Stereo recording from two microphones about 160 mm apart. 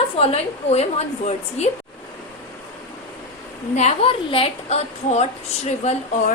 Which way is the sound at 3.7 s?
40° left (ahead or behind).